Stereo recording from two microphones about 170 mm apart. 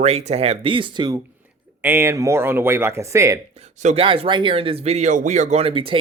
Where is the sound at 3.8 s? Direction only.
35° right (ahead or behind).